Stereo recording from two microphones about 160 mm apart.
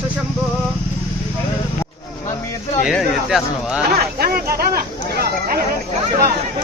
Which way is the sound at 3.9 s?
75° right (ahead or behind).